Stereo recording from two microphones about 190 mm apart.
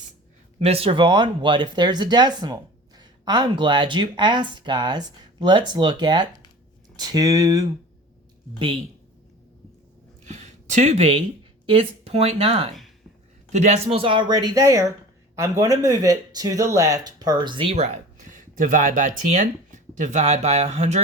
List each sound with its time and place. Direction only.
0.6 s speech: 30° right (ahead or behind)
10.2 s a sound: 35° right (ahead or behind)
11.6 s speech: 30° right (ahead or behind)
18.2 s speech: 40° right (ahead or behind)